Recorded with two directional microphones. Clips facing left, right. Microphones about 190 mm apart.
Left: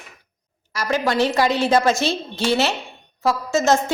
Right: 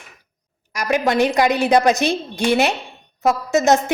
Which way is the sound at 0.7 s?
15° right (ahead or behind).